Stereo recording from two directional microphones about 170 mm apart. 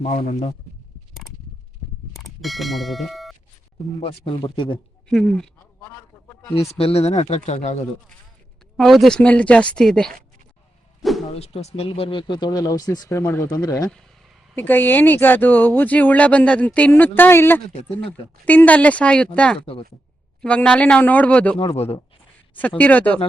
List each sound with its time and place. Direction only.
0.0 s speech: 40° left (ahead or behind)
2.1 s speech: centre (ahead or behind)
4.0 s speech: 30° left (ahead or behind)
5.0 s speech: centre (ahead or behind)
6.7 s speech: 35° left (ahead or behind)
8.7 s speech: centre (ahead or behind)
11.0 s a sound: centre (ahead or behind)
11.3 s speech: 35° left (ahead or behind)
14.5 s speech: 10° left (ahead or behind)
19.5 s speech: 35° left (ahead or behind)
20.4 s speech: 5° left (ahead or behind)
21.6 s speech: 35° left (ahead or behind)
22.8 s speech: 10° left (ahead or behind)